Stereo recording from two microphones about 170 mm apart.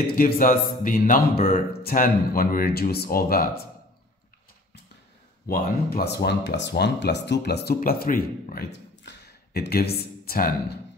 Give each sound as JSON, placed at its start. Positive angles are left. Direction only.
{"t": 0.0, "sound": "a man's voice", "side_deg": 55}
{"t": 5.5, "sound": "speech", "side_deg": 60}
{"t": 9.0, "sound": "a sound", "side_deg": 75}